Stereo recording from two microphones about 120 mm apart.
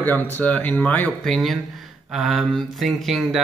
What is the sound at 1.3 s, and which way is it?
A man's voice, centre (ahead or behind).